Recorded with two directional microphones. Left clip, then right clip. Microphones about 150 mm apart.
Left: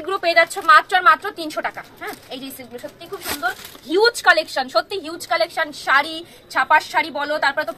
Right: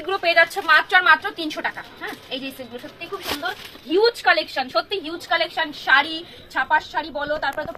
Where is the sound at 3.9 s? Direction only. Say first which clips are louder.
Left 3 dB; centre (ahead or behind).